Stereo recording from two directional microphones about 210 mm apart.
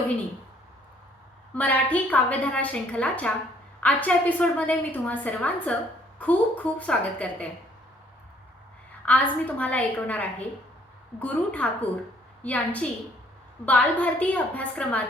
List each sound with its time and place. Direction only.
1.5 s a woman's voice: 5° left (ahead or behind)
9.0 s a woman's voice: 5° left (ahead or behind)